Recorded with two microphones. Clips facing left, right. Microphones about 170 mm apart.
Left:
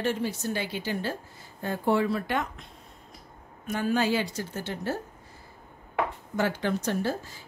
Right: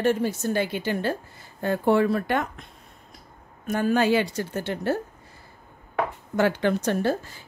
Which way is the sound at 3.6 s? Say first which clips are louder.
Right 4 dB; 50° right (ahead or behind).